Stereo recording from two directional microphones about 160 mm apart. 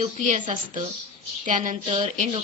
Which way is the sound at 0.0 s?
50° right (ahead or behind).